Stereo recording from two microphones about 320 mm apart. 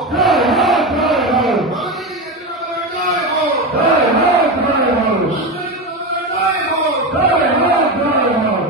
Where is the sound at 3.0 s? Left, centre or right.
Right.